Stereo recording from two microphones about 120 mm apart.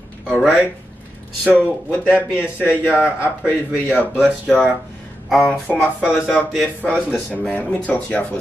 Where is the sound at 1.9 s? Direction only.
20° left (ahead or behind).